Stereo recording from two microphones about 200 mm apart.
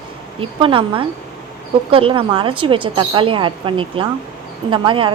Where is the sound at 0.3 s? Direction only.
25° right (ahead or behind).